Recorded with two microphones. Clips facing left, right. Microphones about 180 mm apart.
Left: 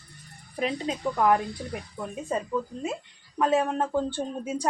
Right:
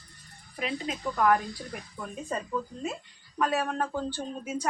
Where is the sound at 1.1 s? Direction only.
20° left (ahead or behind).